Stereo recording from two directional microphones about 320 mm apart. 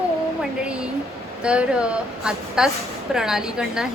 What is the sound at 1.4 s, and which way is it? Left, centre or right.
A woman's voice, centre.